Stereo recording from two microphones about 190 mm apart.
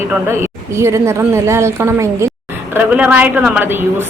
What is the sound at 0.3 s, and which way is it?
A woman's voice, 15° right (ahead or behind).